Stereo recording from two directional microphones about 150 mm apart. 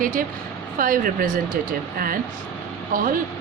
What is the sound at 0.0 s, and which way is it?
Speech, 65° right (ahead or behind).